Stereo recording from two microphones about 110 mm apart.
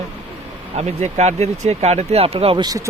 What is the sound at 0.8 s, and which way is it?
Speech, 85° right.